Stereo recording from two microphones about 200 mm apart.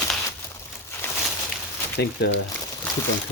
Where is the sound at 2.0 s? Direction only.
55° left (ahead or behind).